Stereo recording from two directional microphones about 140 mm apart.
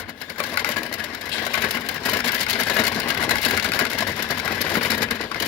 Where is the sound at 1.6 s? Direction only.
15° left (ahead or behind).